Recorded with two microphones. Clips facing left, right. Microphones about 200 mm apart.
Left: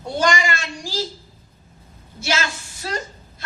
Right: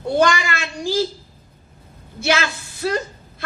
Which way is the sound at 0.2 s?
60° right (ahead or behind).